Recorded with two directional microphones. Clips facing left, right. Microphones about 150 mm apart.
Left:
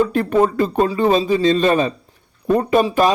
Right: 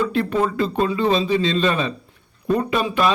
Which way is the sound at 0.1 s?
45° left (ahead or behind).